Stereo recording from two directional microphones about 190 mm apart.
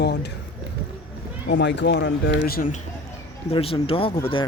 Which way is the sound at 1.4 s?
65° left (ahead or behind).